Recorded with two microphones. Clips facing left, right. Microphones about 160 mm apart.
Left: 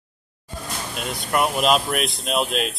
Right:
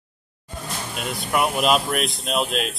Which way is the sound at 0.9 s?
Centre (ahead or behind).